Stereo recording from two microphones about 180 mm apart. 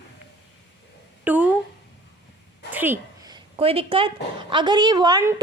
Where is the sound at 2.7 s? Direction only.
10° right (ahead or behind).